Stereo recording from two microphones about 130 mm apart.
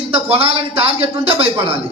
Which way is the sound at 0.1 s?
50° right (ahead or behind).